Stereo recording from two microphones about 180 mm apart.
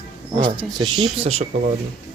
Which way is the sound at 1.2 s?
35° right (ahead or behind).